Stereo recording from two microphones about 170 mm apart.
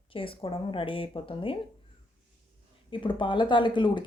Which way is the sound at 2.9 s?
30° left (ahead or behind).